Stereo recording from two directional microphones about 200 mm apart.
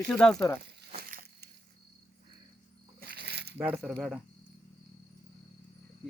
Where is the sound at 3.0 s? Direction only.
55° right (ahead or behind).